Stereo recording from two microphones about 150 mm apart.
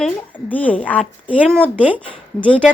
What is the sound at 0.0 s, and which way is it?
Speech, 10° left (ahead or behind).